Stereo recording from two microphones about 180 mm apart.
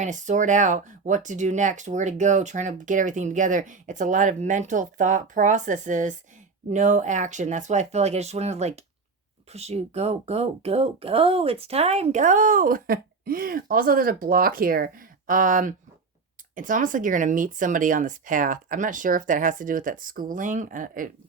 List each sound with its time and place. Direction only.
0.0 s speech: 45° right (ahead or behind)